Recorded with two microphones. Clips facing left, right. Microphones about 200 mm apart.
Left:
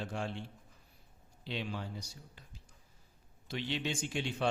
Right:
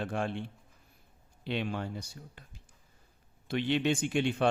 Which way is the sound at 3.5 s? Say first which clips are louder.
Right 8 dB; 60° right (ahead or behind).